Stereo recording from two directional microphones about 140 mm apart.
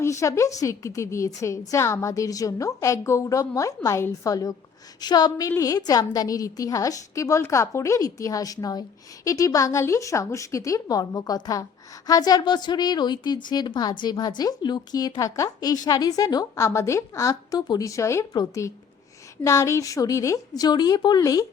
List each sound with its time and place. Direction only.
0.0 s a woman's voice: 20° left (ahead or behind)